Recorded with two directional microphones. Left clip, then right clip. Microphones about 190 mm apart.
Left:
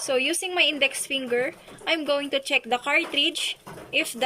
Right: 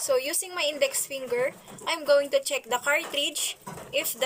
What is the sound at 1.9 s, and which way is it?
A woman's voice, 45° right (ahead or behind).